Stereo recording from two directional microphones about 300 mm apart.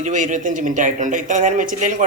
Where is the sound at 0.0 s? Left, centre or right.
Right.